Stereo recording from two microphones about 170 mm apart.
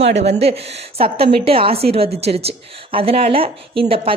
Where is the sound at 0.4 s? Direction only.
35° right (ahead or behind).